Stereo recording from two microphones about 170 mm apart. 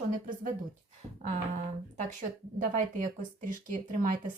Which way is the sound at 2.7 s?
50° right (ahead or behind).